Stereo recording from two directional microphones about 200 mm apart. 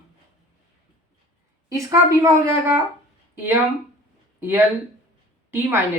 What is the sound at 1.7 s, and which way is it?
Speech, 15° right (ahead or behind).